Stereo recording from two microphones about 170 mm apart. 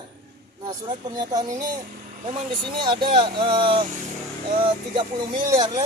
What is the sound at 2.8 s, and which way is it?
Speech, 30° right (ahead or behind).